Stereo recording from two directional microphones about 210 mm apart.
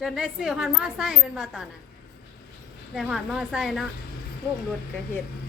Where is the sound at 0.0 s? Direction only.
Centre (ahead or behind).